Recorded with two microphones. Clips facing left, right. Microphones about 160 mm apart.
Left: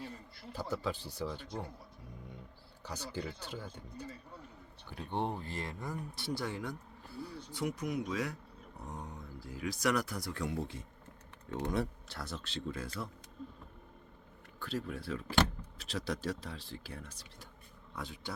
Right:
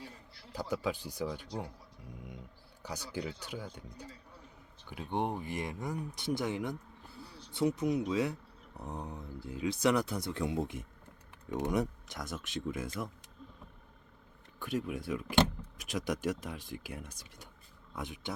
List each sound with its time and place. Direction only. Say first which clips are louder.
0.5 s speech: right 2 dB; 15° right (ahead or behind)
2.8 s speech: right 2 dB; 15° right (ahead or behind)
14.6 s speech: right 3 dB; 15° right (ahead or behind)